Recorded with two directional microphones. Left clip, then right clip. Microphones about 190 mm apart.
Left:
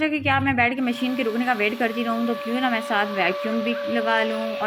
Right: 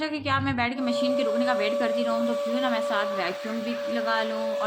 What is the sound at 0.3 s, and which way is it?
Speech, 10° left (ahead or behind).